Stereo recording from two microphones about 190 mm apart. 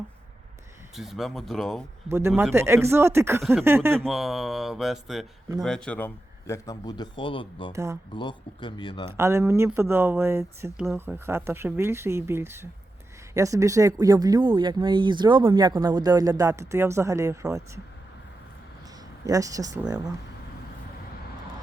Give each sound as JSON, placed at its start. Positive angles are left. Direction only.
{"t": 0.9, "sound": "speech", "side_deg": 0}
{"t": 2.0, "sound": "speech", "side_deg": -15}
{"t": 4.0, "sound": "speech", "side_deg": 0}
{"t": 6.5, "sound": "a man's voice", "side_deg": 20}
{"t": 7.7, "sound": "speech", "side_deg": -15}
{"t": 8.1, "sound": "a man's voice", "side_deg": 25}
{"t": 9.1, "sound": "speech", "side_deg": -15}
{"t": 19.2, "sound": "speech", "side_deg": -20}